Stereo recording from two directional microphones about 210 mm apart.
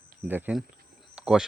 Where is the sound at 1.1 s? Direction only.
5° right (ahead or behind).